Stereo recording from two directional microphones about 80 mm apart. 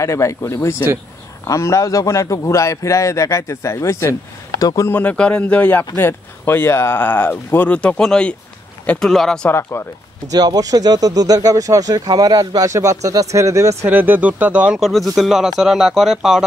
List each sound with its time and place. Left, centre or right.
0.0 s a man's voice: left
4.8 s speech: left
9.5 s a man's voice: left
10.3 s speech: right
13.8 s speech: right
14.8 s speech: centre